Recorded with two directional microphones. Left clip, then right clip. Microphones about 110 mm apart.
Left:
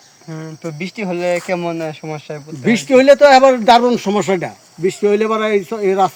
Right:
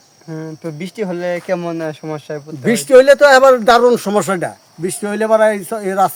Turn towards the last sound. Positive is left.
turn(degrees=-40)  # may be behind; listen again after turning